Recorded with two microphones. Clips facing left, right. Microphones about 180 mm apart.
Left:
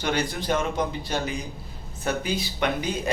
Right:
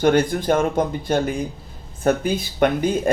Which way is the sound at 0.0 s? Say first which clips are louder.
Right 10 dB; 50° right (ahead or behind).